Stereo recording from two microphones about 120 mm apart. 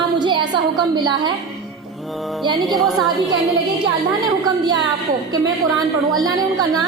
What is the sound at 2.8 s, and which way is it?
Speech, centre (ahead or behind).